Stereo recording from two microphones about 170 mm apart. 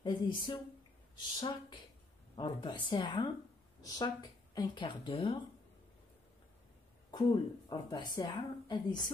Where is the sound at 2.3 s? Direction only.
25° left (ahead or behind).